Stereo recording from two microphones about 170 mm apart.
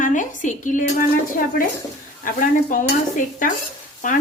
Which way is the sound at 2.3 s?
55° left (ahead or behind).